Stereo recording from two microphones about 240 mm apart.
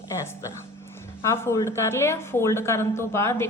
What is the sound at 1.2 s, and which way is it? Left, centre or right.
A woman's voice, centre.